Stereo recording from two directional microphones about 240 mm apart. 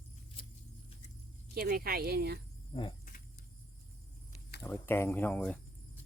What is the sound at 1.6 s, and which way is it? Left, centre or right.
Speech, right.